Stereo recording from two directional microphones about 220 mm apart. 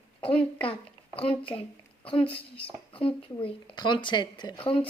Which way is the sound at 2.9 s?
25° left (ahead or behind).